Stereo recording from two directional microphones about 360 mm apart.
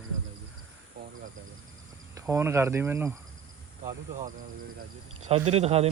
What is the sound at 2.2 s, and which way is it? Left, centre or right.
Speech, centre.